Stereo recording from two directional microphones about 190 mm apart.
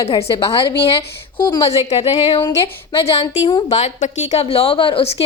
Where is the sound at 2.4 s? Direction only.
15° left (ahead or behind).